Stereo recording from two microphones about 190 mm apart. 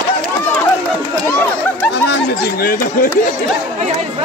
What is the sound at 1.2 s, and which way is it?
Chatter, 10° left (ahead or behind).